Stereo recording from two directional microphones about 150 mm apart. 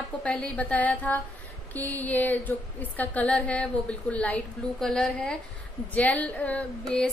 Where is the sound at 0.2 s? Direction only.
5° left (ahead or behind).